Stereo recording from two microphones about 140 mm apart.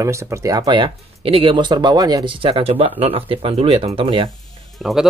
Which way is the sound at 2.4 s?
40° right (ahead or behind).